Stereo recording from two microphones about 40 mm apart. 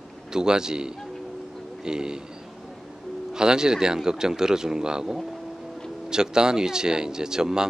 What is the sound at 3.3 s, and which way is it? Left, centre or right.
A man's voice, centre.